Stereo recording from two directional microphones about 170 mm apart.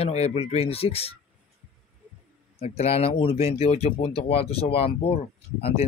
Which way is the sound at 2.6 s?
40° left (ahead or behind).